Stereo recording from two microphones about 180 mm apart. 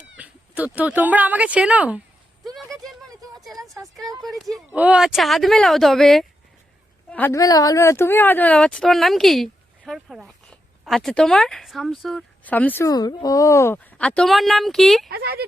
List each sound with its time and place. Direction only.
0.2 s speech: 10° right (ahead or behind)
2.8 s a sound: centre (ahead or behind)
3.5 s a sound: 20° right (ahead or behind)
4.2 s speech: centre (ahead or behind)
7.1 s speech: 10° left (ahead or behind)
15.1 s a woman's voice: 60° right (ahead or behind)